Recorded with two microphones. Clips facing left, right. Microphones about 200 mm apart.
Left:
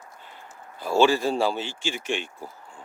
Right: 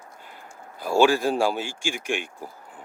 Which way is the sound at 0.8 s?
15° right (ahead or behind).